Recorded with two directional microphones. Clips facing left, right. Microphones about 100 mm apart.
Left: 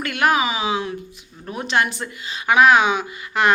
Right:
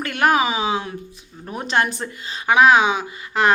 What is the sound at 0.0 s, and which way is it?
A woman's voice, 35° right (ahead or behind).